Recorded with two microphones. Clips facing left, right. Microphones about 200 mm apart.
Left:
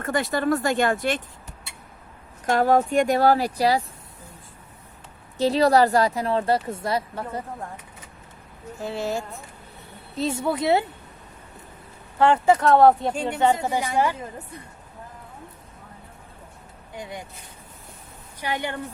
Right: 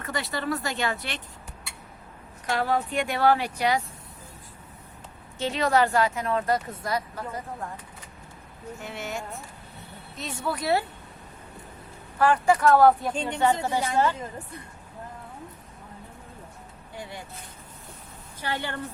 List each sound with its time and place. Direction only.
0.0 s speech: 50° left (ahead or behind)
2.5 s speech: 45° left (ahead or behind)
5.4 s speech: 35° left (ahead or behind)
8.8 s speech: 35° left (ahead or behind)
12.2 s a woman's voice: 25° left (ahead or behind)
16.9 s speech: 20° left (ahead or behind)
18.3 s a woman's voice: 15° left (ahead or behind)